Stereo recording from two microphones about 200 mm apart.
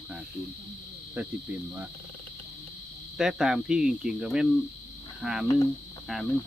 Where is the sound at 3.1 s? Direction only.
5° right (ahead or behind).